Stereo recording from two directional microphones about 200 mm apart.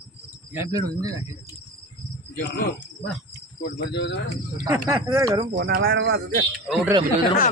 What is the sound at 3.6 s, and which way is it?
Cricket, 60° left (ahead or behind).